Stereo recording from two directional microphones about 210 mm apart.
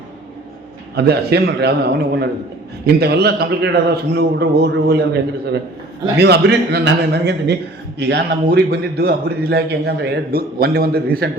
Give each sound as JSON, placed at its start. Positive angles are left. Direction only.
{"t": 0.9, "sound": "a man's voice", "side_deg": -50}
{"t": 6.1, "sound": "a man's voice", "side_deg": -50}